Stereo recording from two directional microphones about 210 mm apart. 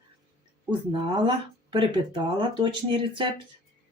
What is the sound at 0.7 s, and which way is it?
Speech, 25° right (ahead or behind).